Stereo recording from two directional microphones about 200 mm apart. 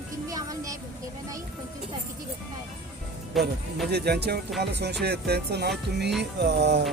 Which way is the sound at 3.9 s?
55° right (ahead or behind).